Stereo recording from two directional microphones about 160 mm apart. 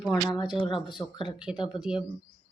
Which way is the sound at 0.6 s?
30° left (ahead or behind).